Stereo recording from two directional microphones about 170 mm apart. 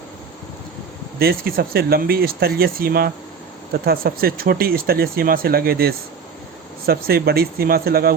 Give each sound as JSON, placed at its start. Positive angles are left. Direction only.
{"t": 1.2, "sound": "speech", "side_deg": -60}